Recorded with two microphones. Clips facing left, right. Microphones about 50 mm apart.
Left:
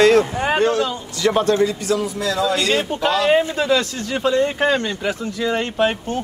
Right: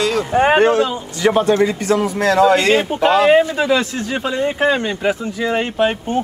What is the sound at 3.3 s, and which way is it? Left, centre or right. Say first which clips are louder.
Speech: right 3 dB; centre.